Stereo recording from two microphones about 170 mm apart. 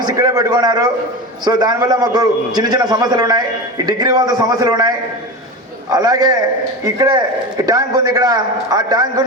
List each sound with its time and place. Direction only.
0.0 s a man's voice: 20° right (ahead or behind)